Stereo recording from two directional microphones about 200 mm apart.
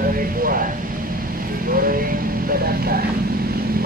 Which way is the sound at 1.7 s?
45° right (ahead or behind).